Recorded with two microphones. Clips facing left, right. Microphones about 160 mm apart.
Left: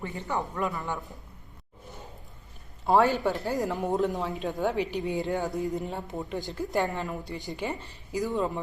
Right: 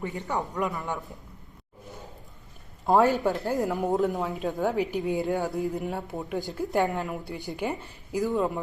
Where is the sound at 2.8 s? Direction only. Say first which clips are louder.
Right 1 dB; centre (ahead or behind).